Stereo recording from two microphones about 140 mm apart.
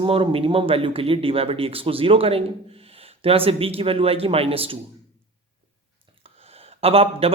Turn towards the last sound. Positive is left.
turn(degrees=-45)  # may be behind; listen again after turning